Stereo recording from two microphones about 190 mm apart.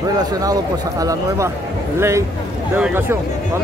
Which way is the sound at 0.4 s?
20° right (ahead or behind).